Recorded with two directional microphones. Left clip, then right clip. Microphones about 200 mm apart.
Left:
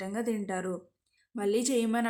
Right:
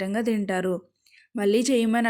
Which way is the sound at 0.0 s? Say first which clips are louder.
Right 7 dB; 35° right (ahead or behind).